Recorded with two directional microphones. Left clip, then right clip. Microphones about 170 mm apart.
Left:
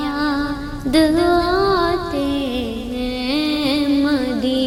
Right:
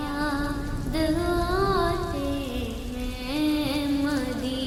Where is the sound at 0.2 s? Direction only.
40° left (ahead or behind).